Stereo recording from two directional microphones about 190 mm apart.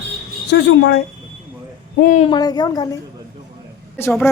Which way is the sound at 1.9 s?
40° left (ahead or behind).